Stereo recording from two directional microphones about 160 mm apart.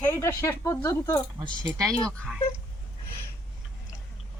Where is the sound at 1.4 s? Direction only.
25° right (ahead or behind).